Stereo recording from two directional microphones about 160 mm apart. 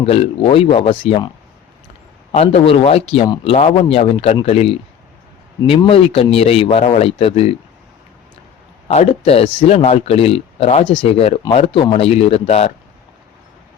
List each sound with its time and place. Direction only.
0.0 s speech: 40° left (ahead or behind)
2.3 s speech: 40° left (ahead or behind)
8.9 s speech: 40° left (ahead or behind)